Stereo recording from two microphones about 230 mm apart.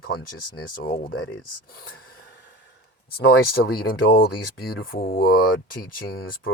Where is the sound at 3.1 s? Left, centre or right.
Left.